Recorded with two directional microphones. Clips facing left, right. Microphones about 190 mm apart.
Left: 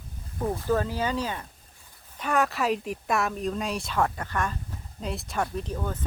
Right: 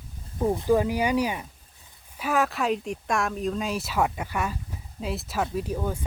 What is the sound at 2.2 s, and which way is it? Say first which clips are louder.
Speech: right 1 dB; centre (ahead or behind).